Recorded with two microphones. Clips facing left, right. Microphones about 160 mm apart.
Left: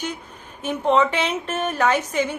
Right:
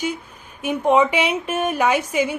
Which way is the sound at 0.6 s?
10° right (ahead or behind).